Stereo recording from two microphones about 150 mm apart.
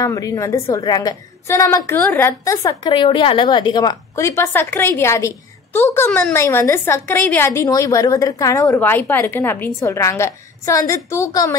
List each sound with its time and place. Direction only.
0.0 s a woman's voice: 20° left (ahead or behind)